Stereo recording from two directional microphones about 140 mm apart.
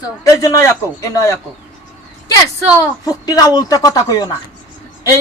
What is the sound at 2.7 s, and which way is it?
Speech, 25° left (ahead or behind).